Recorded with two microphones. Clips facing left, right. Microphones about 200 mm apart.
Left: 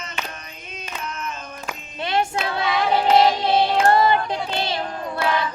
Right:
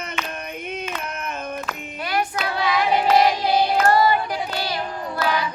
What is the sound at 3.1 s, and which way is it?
Music, 25° left (ahead or behind).